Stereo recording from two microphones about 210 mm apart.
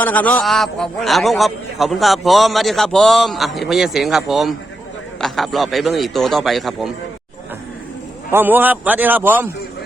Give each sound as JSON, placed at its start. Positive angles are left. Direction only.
{"t": 0.0, "sound": "a man's voice", "side_deg": 5}
{"t": 8.3, "sound": "a man's voice", "side_deg": -10}